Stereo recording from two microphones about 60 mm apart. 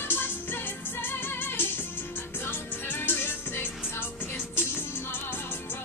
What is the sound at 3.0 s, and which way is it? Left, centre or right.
Music, left.